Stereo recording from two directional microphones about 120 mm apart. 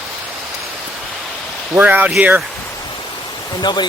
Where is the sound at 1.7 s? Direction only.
15° right (ahead or behind).